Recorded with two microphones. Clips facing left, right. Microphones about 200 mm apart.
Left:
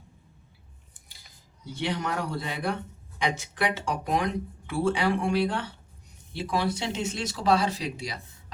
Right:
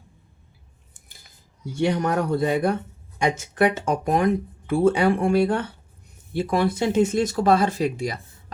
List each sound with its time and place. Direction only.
1.7 s speech: 45° right (ahead or behind)